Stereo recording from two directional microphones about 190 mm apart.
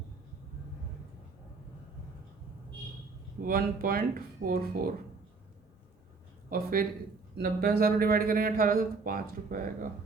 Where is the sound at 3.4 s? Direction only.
50° right (ahead or behind).